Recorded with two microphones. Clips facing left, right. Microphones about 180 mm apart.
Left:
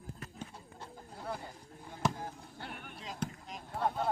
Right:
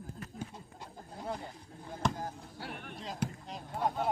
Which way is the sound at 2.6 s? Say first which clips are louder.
Right 3 dB; centre (ahead or behind).